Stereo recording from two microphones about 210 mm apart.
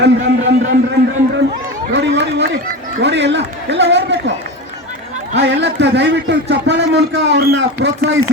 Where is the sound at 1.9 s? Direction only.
55° right (ahead or behind).